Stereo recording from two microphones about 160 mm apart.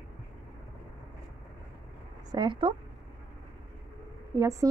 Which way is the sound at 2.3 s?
30° right (ahead or behind).